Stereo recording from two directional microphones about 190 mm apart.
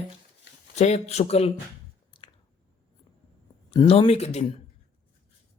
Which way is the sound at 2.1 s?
25° left (ahead or behind).